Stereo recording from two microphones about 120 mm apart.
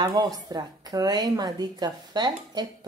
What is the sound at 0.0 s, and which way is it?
A woman's voice, 30° right (ahead or behind).